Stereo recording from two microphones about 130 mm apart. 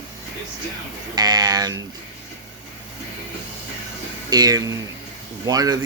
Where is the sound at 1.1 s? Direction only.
30° right (ahead or behind).